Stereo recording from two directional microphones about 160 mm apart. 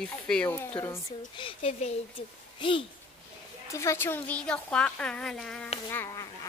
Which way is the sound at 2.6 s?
30° left (ahead or behind).